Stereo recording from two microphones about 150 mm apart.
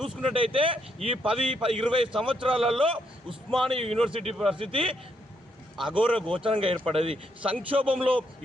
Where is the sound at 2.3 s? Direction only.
35° right (ahead or behind).